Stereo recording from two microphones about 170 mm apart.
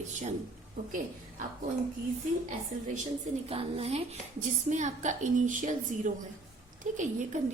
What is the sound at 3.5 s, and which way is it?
A woman's voice, 35° right (ahead or behind).